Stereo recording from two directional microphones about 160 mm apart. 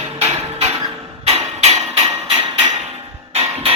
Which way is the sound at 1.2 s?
40° right (ahead or behind).